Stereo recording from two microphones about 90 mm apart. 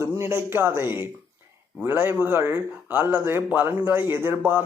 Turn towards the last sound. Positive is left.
turn(degrees=-20)  # may be behind; listen again after turning